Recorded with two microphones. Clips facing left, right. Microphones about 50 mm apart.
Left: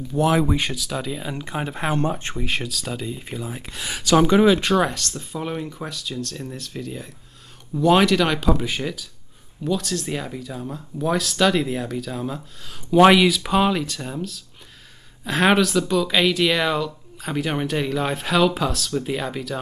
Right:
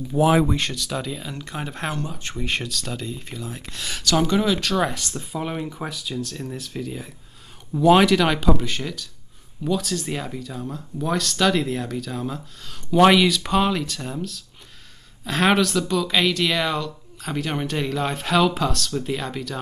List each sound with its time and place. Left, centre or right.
0.1 s speech: centre
0.5 s speech: centre
1.2 s speech: centre
2.0 s speech: left
2.3 s speech: centre; by 4.7 s left
4.9 s speech: centre
8.5 s speech: centre